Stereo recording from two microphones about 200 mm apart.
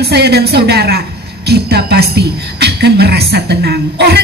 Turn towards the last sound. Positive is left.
turn(degrees=-55)  # may be behind; listen again after turning